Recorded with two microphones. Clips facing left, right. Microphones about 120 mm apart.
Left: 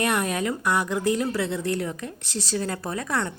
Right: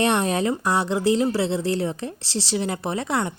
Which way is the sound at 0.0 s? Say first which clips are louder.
Right 4 dB; 25° right (ahead or behind).